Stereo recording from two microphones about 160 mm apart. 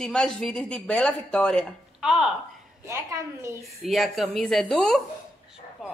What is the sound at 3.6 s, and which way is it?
A woman's voice, centre (ahead or behind).